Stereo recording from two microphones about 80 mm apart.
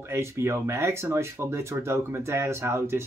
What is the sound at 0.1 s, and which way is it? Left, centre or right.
Speech, right.